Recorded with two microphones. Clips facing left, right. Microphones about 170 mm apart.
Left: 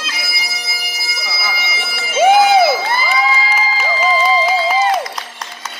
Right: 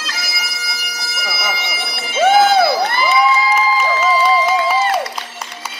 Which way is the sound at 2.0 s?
10° left (ahead or behind).